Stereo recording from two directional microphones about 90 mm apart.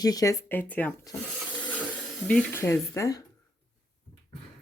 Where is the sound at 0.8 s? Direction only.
15° left (ahead or behind).